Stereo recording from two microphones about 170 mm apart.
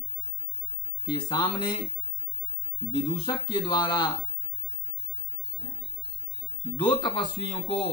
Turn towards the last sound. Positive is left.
turn(degrees=30)  # may be behind; listen again after turning